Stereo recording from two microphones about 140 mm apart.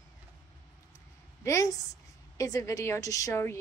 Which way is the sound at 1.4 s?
20° left (ahead or behind).